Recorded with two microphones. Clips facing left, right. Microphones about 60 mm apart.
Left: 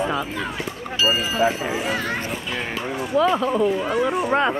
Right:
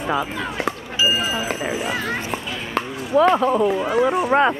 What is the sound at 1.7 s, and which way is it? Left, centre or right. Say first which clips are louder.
Speech: even; centre.